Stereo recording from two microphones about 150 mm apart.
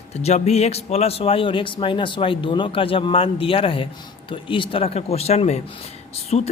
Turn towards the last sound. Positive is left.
turn(degrees=45)  # may be behind; listen again after turning